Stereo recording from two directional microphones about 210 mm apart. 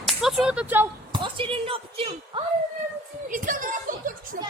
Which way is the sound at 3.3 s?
40° right (ahead or behind).